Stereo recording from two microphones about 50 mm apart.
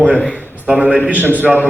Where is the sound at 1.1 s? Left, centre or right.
Right.